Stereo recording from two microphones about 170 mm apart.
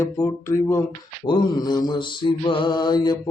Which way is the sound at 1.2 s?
25° left (ahead or behind).